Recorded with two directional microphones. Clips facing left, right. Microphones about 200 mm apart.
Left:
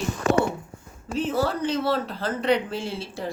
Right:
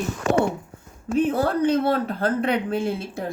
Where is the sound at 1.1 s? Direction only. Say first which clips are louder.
Right 4 dB; 55° right (ahead or behind).